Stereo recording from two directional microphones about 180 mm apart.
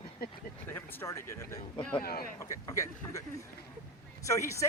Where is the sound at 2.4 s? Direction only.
15° left (ahead or behind).